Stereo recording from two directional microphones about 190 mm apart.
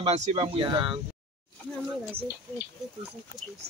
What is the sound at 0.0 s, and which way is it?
Speech, 35° right (ahead or behind).